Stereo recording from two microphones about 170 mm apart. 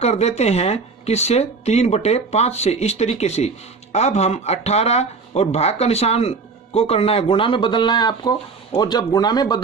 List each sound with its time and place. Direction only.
0.0 s speech: 40° left (ahead or behind); by 9.6 s 25° left (ahead or behind)